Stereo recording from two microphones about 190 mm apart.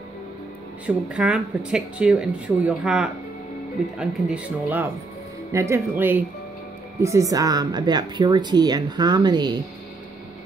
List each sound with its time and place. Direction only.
0.8 s speech: 5° right (ahead or behind); by 9.6 s 20° right (ahead or behind)